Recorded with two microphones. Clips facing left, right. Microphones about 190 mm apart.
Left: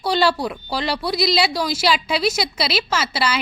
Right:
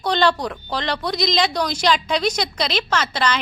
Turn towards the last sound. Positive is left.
turn(degrees=10)  # may be behind; listen again after turning